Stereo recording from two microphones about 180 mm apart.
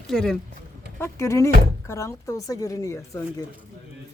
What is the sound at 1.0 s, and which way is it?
Speech, 15° left (ahead or behind).